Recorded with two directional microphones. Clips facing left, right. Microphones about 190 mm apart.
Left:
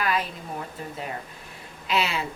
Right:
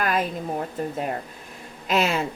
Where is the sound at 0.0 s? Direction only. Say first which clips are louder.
Right 3 dB; 45° right (ahead or behind).